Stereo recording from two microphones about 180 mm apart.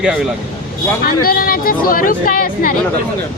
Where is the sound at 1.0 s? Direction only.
55° left (ahead or behind).